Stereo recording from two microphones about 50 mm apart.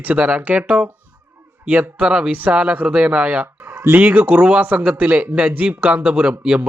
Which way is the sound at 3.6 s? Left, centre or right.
Right.